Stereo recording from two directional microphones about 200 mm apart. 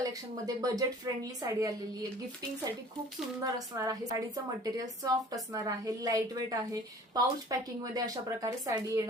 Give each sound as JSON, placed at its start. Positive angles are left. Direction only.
{"t": 0.0, "sound": "a woman's voice", "side_deg": -15}
{"t": 3.4, "sound": "a woman's voice", "side_deg": -15}